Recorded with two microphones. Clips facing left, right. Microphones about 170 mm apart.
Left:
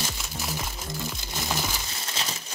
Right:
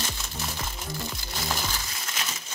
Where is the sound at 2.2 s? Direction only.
30° left (ahead or behind).